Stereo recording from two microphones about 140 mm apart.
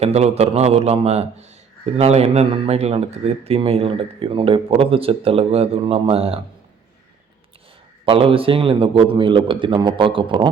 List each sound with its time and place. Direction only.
0.0 s speech: 50° right (ahead or behind)
8.0 s a man's voice: 40° right (ahead or behind)